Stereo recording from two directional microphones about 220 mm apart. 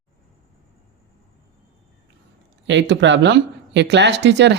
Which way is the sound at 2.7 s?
55° right (ahead or behind).